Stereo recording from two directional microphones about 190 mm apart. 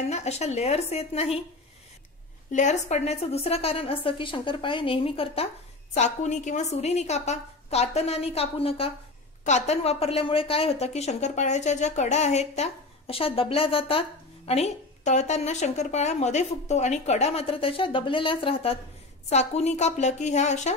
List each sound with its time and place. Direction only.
0.1 s a woman's voice: 35° left (ahead or behind)
2.5 s a woman's voice: 40° left (ahead or behind)